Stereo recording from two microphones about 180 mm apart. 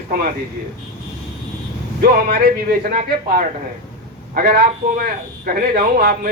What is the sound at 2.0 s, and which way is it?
Speech, 55° right (ahead or behind).